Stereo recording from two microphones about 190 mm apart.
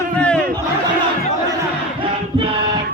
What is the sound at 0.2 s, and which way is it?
Crowd, 5° left (ahead or behind).